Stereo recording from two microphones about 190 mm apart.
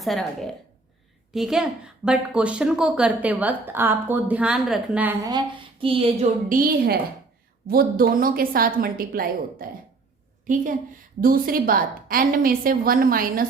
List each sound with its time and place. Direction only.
0.0 s a woman's voice: centre (ahead or behind)
5.8 s speech: 30° right (ahead or behind)
6.5 s a woman's voice: 50° right (ahead or behind)